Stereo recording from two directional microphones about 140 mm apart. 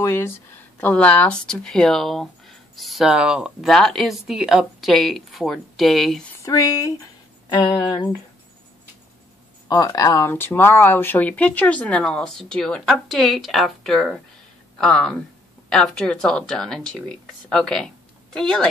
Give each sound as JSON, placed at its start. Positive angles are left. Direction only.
{"t": 0.0, "sound": "speech", "side_deg": 20}
{"t": 6.4, "sound": "speech", "side_deg": 25}
{"t": 9.7, "sound": "speech", "side_deg": 30}
{"t": 10.3, "sound": "speech", "side_deg": 15}